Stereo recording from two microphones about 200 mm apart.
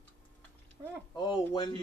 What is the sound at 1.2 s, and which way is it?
Speech, 20° left (ahead or behind).